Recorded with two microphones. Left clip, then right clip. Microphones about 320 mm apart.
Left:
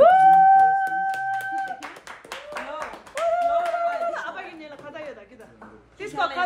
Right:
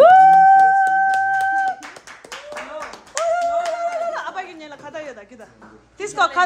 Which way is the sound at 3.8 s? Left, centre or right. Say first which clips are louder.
Right 2 dB; right.